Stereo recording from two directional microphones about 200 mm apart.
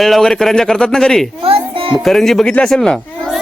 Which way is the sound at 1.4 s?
25° right (ahead or behind).